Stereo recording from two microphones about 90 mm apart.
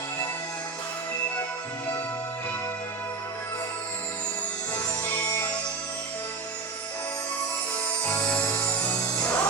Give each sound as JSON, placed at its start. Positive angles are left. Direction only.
{"t": 4.7, "sound": "music", "side_deg": 20}
{"t": 8.3, "sound": "music", "side_deg": 20}